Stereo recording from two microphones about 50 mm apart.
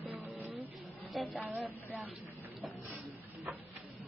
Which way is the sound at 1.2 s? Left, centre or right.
Centre.